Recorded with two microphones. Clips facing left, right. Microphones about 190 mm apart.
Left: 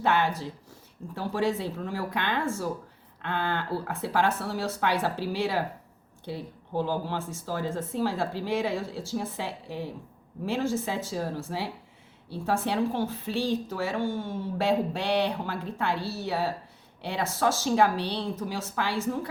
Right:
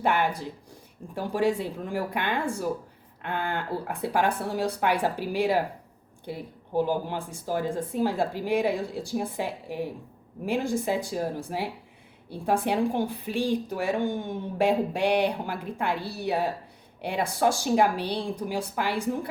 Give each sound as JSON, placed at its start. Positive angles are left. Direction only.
{"t": 0.0, "sound": "a woman's voice", "side_deg": -10}